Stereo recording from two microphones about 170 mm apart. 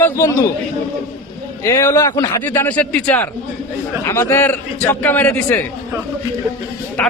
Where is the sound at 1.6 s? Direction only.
15° left (ahead or behind).